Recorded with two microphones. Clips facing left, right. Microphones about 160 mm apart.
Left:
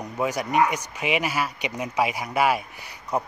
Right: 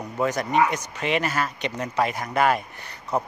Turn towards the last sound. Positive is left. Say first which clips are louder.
# right 1 dB
turn(degrees=10)  # may be behind; listen again after turning